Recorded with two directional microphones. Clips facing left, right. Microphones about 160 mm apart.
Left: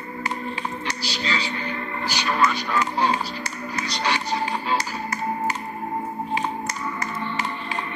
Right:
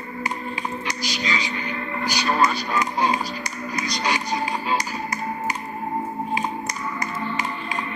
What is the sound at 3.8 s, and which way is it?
Music, 15° right (ahead or behind).